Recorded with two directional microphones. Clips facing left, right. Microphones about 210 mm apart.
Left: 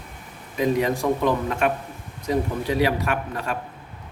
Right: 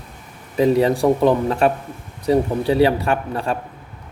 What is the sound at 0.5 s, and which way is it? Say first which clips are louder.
Speech: right 6 dB; 30° right (ahead or behind).